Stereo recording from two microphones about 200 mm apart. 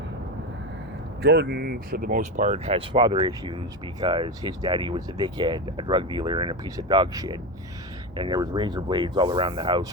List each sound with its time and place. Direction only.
1.2 s speech: 55° right (ahead or behind); by 9.8 s 25° right (ahead or behind)